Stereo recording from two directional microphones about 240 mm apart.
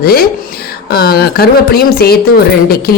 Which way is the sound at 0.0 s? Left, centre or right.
Left.